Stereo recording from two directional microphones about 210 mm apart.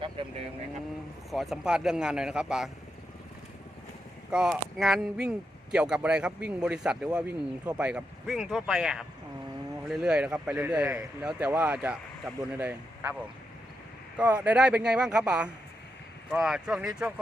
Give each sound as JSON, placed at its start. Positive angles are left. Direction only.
{"t": 0.0, "sound": "vehicle", "side_deg": -25}
{"t": 1.3, "sound": "speech", "side_deg": 0}
{"t": 4.3, "sound": "speech", "side_deg": 0}
{"t": 14.2, "sound": "speech", "side_deg": -5}